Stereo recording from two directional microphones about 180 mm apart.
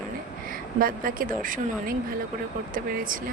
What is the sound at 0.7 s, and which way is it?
Speech, 50° right (ahead or behind).